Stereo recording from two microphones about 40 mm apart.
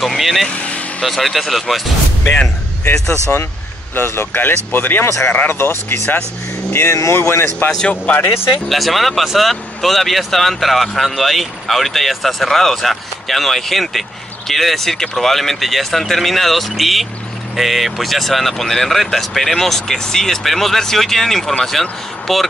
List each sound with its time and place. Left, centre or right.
0.0 s speech: centre
0.5 s vehicle: left
1.0 s speech: centre
3.9 s speech: left
5.5 s speech: left
7.9 s speech: left
8.6 s speech: centre